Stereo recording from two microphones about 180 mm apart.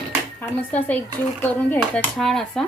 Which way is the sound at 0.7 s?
10° left (ahead or behind).